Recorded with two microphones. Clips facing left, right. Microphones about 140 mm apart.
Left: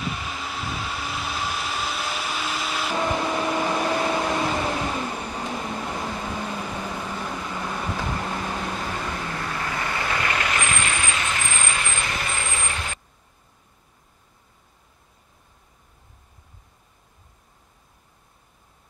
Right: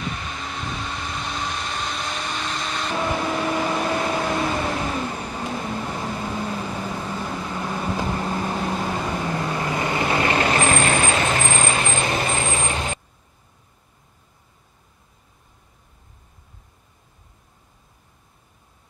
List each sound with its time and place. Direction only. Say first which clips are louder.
0.0 s vehicle: even; 5° left (ahead or behind); by 8.6 s 15° right (ahead or behind)
8.6 s vehicle: right 4 dB; 25° right (ahead or behind)